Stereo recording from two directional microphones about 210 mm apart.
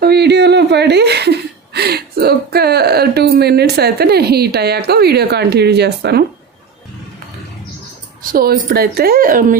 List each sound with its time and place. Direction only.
0.0 s speech: 50° right (ahead or behind)
8.3 s speech: 45° right (ahead or behind)